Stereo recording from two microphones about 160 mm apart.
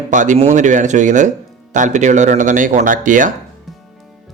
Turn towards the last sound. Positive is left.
turn(degrees=-55)  # may be behind; listen again after turning